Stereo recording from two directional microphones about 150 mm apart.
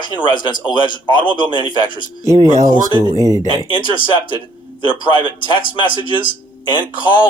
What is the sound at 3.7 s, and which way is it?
Speech, 35° left (ahead or behind).